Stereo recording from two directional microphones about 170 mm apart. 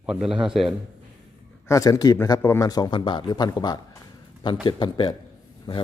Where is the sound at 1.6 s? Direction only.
20° left (ahead or behind).